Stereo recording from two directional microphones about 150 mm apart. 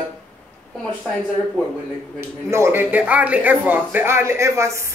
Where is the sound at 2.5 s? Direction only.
15° right (ahead or behind).